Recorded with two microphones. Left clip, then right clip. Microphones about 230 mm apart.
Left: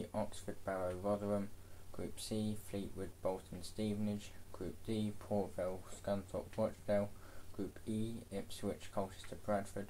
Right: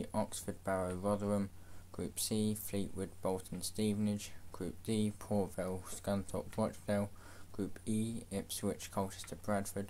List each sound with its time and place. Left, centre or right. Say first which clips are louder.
0.1 s speech: right 4 dB; right